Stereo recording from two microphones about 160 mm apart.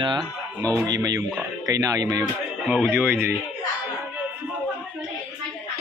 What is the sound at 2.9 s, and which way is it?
Speech, 15° right (ahead or behind).